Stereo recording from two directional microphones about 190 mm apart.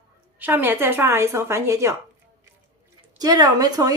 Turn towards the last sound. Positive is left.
turn(degrees=-20)  # may be behind; listen again after turning